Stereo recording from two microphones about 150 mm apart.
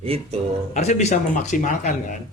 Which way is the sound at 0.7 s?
50° left (ahead or behind).